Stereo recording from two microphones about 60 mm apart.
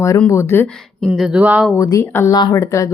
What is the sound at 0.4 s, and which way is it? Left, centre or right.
Speech, left.